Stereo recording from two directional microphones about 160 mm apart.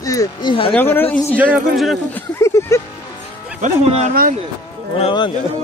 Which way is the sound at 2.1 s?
15° left (ahead or behind).